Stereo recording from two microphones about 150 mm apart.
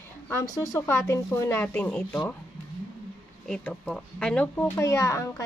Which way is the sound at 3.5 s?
5° left (ahead or behind).